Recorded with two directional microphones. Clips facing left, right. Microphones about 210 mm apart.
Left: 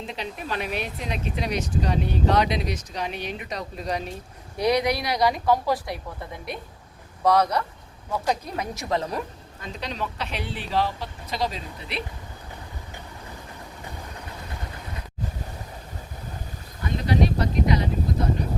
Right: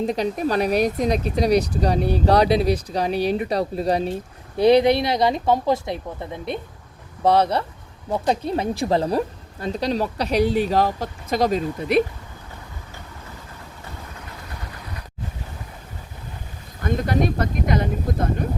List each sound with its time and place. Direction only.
0.0 s speech: 40° right (ahead or behind)
16.8 s speech: 50° right (ahead or behind)